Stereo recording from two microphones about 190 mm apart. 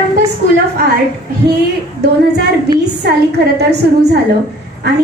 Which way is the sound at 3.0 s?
60° right (ahead or behind).